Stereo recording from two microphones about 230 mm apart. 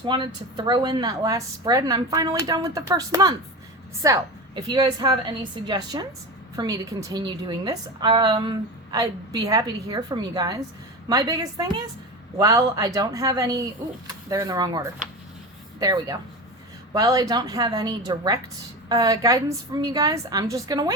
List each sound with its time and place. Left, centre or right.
0.0 s a woman's voice: centre